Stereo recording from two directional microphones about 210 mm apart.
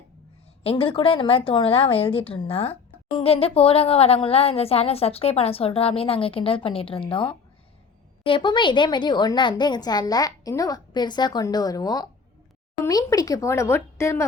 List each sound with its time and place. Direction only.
0.6 s a woman's voice: 25° left (ahead or behind)